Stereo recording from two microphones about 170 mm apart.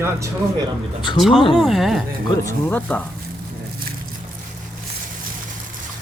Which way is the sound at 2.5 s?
10° left (ahead or behind).